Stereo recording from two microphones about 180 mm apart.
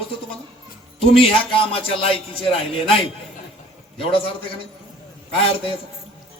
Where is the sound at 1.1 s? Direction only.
30° left (ahead or behind).